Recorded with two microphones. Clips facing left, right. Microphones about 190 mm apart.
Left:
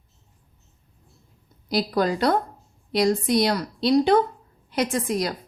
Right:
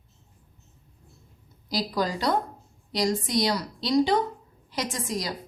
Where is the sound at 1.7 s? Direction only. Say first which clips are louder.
Left 5 dB; 60° left (ahead or behind).